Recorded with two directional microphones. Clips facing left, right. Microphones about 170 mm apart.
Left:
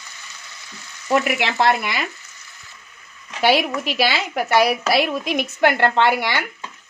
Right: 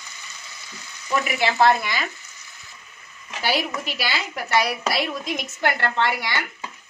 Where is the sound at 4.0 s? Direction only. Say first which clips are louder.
Left 10 dB; 65° left (ahead or behind).